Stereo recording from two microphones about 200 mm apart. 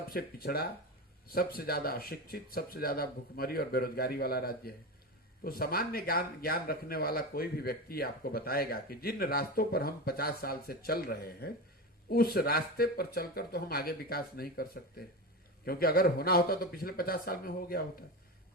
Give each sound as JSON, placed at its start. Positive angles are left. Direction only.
{"t": 0.1, "sound": "a man's voice", "side_deg": 50}